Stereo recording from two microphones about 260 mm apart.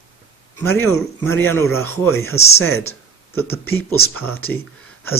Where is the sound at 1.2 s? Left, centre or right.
Centre.